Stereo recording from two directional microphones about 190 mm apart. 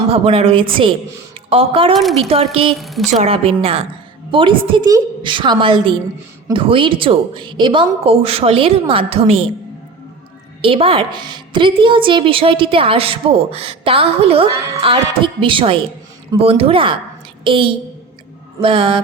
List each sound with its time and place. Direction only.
0.1 s a woman's voice: 30° right (ahead or behind)
2.7 s a woman's voice: centre (ahead or behind)
3.1 s a woman's voice: 35° right (ahead or behind)
10.6 s a woman's voice: 30° right (ahead or behind)